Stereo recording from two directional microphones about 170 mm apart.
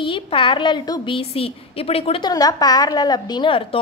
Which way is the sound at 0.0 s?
30° left (ahead or behind).